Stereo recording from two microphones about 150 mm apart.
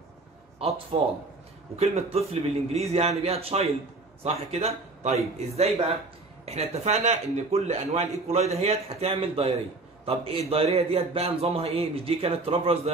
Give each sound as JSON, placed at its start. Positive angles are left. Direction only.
{"t": 0.6, "sound": "a man's voice", "side_deg": -40}